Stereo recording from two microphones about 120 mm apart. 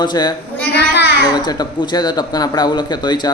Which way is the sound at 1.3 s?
35° left (ahead or behind).